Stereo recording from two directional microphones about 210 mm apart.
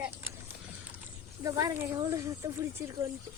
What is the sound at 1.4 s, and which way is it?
A woman's voice, 15° right (ahead or behind).